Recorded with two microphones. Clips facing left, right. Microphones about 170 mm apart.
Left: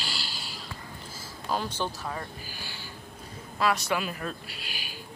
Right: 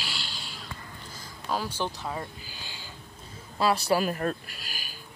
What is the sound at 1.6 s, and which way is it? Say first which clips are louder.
Speech: even; 15° right (ahead or behind).